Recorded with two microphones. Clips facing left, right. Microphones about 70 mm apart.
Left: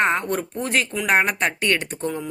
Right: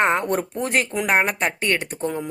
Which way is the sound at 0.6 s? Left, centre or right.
Right.